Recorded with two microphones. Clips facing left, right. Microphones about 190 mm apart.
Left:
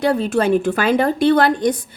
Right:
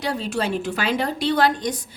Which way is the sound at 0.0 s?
55° left (ahead or behind).